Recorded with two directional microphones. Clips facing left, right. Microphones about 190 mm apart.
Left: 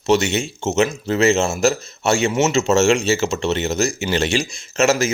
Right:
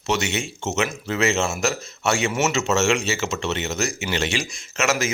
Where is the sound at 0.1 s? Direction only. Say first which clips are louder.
Left 7 dB; 30° left (ahead or behind).